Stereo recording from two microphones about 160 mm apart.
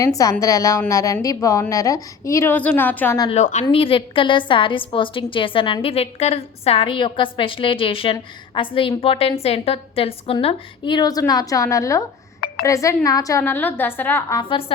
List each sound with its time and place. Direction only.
0.0 s a woman's voice: 20° left (ahead or behind)
3.3 s a woman's voice: 45° left (ahead or behind)
3.7 s a woman's voice: 35° left (ahead or behind); by 14.4 s 15° left (ahead or behind)